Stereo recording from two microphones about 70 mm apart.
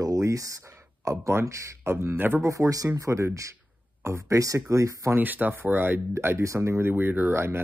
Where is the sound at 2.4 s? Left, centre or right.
Right.